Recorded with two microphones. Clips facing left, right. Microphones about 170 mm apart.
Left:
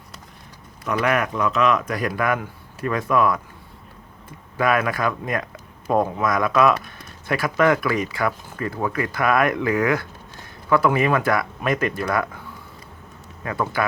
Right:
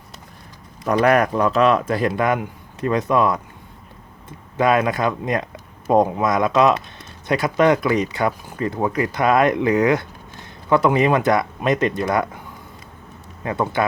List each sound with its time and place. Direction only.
0.9 s speech: 35° right (ahead or behind); by 12.4 s 20° right (ahead or behind)
13.4 s speech: 25° right (ahead or behind)